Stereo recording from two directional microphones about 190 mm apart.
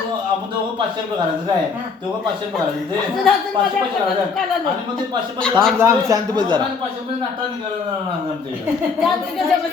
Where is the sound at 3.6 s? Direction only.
25° right (ahead or behind).